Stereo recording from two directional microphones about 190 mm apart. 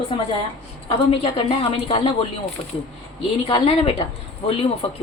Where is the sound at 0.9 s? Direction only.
30° left (ahead or behind).